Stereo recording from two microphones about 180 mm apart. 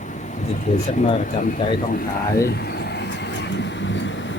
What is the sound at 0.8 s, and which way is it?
Speech, 45° left (ahead or behind).